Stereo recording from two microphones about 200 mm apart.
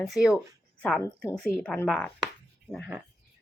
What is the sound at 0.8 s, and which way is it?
Speech, 10° left (ahead or behind).